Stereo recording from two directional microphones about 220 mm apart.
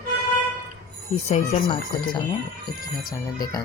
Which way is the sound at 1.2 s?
30° left (ahead or behind).